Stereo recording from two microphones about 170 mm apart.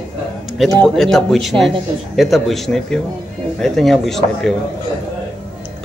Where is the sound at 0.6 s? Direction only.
Centre (ahead or behind).